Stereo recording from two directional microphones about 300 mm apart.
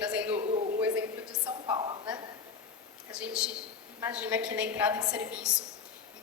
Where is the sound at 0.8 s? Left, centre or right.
Centre.